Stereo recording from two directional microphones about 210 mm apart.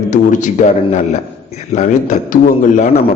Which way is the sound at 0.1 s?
35° left (ahead or behind).